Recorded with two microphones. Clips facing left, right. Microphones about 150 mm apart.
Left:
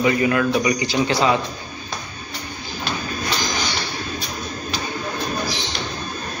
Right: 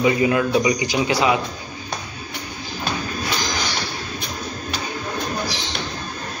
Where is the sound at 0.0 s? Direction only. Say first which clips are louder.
Even; 20° right (ahead or behind).